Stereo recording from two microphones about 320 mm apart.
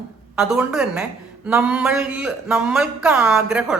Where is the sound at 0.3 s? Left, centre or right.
Centre.